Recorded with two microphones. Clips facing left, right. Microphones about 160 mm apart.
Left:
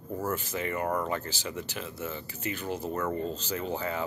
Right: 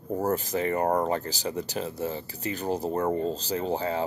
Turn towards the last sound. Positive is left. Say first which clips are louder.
# right 4 dB
turn(degrees=-35)  # may be behind; listen again after turning